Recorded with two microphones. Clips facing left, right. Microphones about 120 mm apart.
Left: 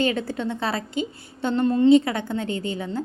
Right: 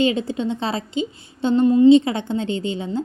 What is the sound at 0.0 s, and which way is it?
A woman's voice, 20° right (ahead or behind).